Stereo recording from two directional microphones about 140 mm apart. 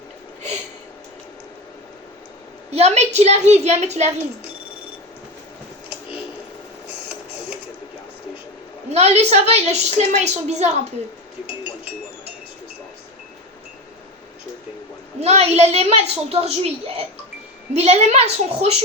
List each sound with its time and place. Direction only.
2.6 s a woman's voice: 50° right (ahead or behind)
8.9 s a woman's voice: 50° right (ahead or behind)
15.2 s a woman's voice: 50° right (ahead or behind)